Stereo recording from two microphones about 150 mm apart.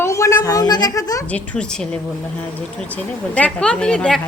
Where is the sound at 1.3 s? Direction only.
10° left (ahead or behind).